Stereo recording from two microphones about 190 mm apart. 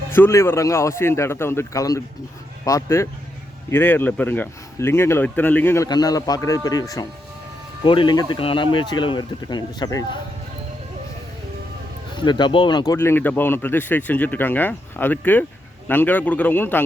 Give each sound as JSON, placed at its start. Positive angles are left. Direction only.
{"t": 0.1, "sound": "speech", "side_deg": 15}
{"t": 12.1, "sound": "speech", "side_deg": 25}